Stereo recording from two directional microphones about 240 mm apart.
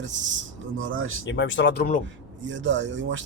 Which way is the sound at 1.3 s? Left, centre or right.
Left.